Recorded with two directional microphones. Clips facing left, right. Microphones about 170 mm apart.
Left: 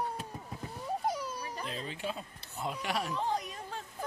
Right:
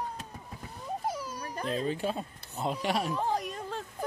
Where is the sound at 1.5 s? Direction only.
45° right (ahead or behind).